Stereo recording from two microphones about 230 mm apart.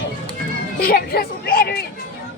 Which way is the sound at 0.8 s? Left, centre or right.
Left.